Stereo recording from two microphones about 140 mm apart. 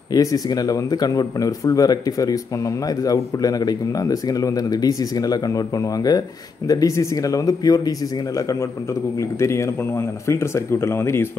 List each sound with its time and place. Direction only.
0.1 s speech: 25° left (ahead or behind)